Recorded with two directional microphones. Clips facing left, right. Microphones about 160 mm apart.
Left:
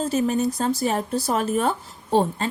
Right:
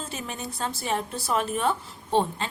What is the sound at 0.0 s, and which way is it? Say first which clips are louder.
A woman's voice: left 13 dB; 40° left (ahead or behind).